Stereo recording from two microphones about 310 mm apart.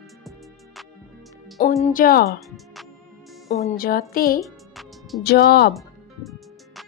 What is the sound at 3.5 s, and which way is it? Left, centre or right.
Speech, left.